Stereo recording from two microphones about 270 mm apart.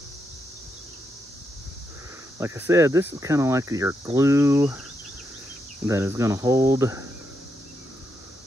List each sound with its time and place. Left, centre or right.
2.3 s speech: centre
5.9 s speech: centre